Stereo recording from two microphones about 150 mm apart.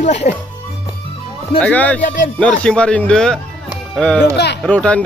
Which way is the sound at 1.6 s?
10° left (ahead or behind).